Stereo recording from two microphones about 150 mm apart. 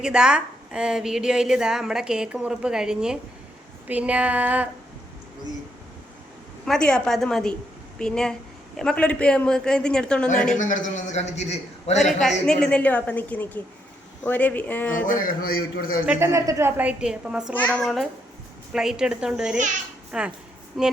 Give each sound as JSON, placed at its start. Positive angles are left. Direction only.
{"t": 0.0, "sound": "a woman's voice", "side_deg": -5}
{"t": 6.7, "sound": "a woman's voice", "side_deg": 5}
{"t": 10.6, "sound": "a man's voice", "side_deg": 55}
{"t": 11.9, "sound": "a woman's voice", "side_deg": 0}
{"t": 14.9, "sound": "a man's voice", "side_deg": 65}
{"t": 16.0, "sound": "a woman's voice", "side_deg": -15}
{"t": 17.5, "sound": "a woman's voice", "side_deg": 10}